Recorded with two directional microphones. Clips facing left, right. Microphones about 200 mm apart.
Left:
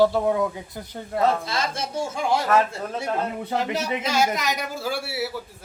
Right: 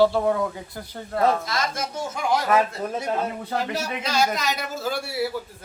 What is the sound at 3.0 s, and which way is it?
Speech, 10° right (ahead or behind).